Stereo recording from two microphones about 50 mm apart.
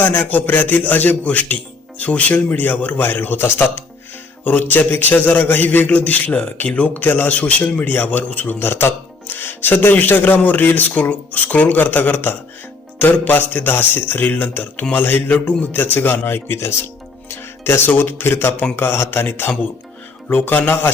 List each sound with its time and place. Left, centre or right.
0.0 s a man's voice: left
3.0 s a man's voice: left
8.5 s a man's voice: left